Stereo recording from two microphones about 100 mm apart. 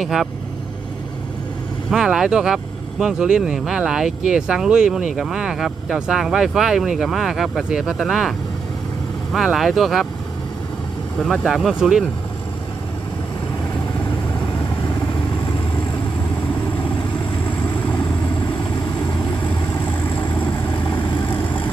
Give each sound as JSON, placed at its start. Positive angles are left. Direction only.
{"t": 0.0, "sound": "speech", "side_deg": 0}
{"t": 1.9, "sound": "speech", "side_deg": -5}
{"t": 11.1, "sound": "speech", "side_deg": 5}
{"t": 20.2, "sound": "vehicle", "side_deg": 20}
{"t": 20.7, "sound": "vehicle", "side_deg": 50}